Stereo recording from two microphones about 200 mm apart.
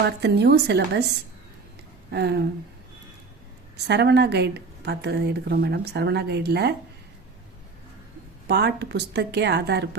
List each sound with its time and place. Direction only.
0.0 s a woman's voice: 55° right (ahead or behind)
2.1 s a woman's voice: 55° right (ahead or behind)
3.8 s a woman's voice: 55° right (ahead or behind)
8.4 s a woman's voice: 55° right (ahead or behind)